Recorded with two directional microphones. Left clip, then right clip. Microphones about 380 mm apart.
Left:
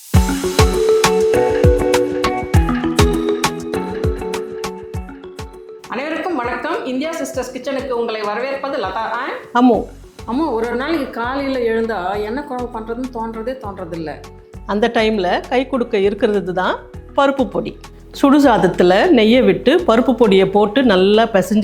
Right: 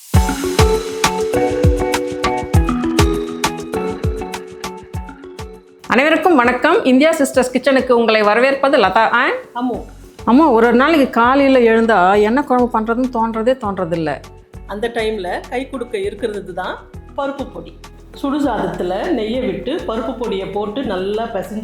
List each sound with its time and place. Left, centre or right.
0.1 s music: centre
5.9 s a sound: right
7.9 s speech: right
9.5 s speech: left
10.2 s speech: right
12.8 s speech: right
14.7 s speech: left
17.5 s speech: left